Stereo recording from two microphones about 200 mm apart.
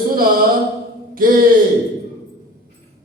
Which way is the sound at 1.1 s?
45° right (ahead or behind).